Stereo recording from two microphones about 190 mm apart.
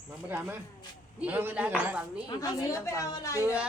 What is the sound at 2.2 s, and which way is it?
Speech, 20° left (ahead or behind).